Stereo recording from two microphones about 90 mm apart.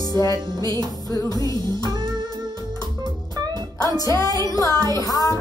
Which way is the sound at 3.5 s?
45° left (ahead or behind).